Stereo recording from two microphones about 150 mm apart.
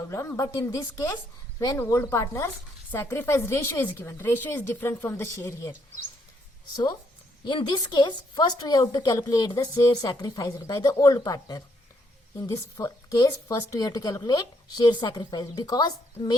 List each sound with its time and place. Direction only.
0.1 s a woman's voice: 20° left (ahead or behind)
7.4 s speech: 30° left (ahead or behind)